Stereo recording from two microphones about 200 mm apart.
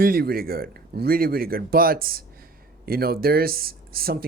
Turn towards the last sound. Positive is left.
turn(degrees=-50)  # may be behind; listen again after turning